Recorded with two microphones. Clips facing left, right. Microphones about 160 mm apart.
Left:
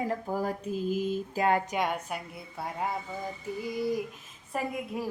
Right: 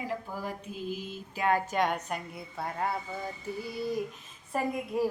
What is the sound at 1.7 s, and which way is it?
Speech, 10° left (ahead or behind).